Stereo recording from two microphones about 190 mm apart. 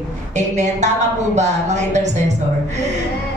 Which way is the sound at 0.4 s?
40° right (ahead or behind).